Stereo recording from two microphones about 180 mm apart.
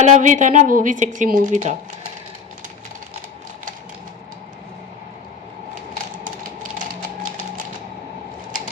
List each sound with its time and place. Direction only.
0.0 s speech: 45° right (ahead or behind)
6.2 s music: 50° right (ahead or behind)